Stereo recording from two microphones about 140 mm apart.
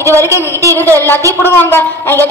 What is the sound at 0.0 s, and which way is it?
Speech, 20° right (ahead or behind).